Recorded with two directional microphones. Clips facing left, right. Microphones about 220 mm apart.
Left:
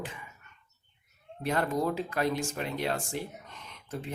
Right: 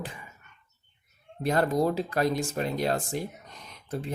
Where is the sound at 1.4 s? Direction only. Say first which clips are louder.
Right 4 dB; 40° right (ahead or behind).